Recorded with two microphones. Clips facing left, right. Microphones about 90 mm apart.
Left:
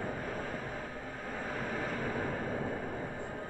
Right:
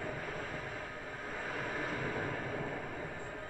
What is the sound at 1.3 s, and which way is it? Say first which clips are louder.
Vehicle: left 2 dB; 5° right (ahead or behind).